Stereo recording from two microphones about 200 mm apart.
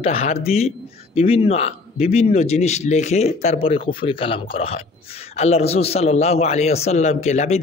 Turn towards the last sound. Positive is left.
turn(degrees=35)  # may be behind; listen again after turning